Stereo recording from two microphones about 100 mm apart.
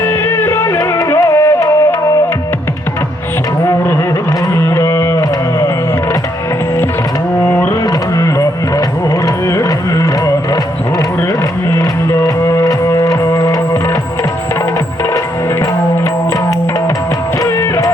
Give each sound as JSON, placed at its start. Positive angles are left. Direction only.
{"t": 0.0, "sound": "music", "side_deg": 25}
{"t": 4.5, "sound": "music", "side_deg": 30}
{"t": 7.4, "sound": "music", "side_deg": 20}
{"t": 9.2, "sound": "music", "side_deg": 35}
{"t": 12.2, "sound": "music", "side_deg": 30}
{"t": 17.4, "sound": "music", "side_deg": 35}